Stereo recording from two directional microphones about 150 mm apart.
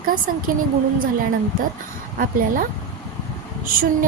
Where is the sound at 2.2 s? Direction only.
70° right (ahead or behind).